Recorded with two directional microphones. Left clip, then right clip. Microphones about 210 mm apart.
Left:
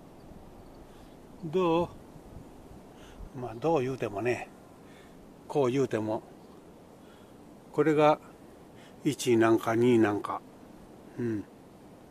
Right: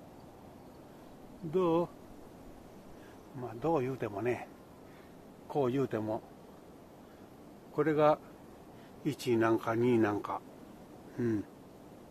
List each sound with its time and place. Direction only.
1.5 s speech: 40° left (ahead or behind)
3.3 s speech: 40° left (ahead or behind)
5.5 s speech: 40° left (ahead or behind)
7.7 s speech: 45° left (ahead or behind); by 10.4 s 25° left (ahead or behind)
11.1 s a sound: 10° right (ahead or behind)